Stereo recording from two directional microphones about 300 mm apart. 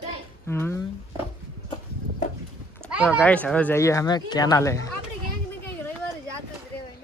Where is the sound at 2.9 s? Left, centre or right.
Centre.